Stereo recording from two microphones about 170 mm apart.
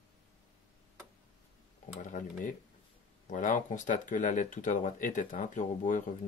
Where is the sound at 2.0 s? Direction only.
50° left (ahead or behind).